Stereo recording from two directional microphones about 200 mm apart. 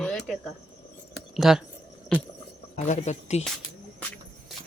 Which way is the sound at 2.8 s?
35° left (ahead or behind).